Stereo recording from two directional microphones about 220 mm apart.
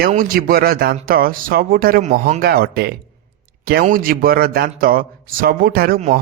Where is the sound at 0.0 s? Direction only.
40° right (ahead or behind).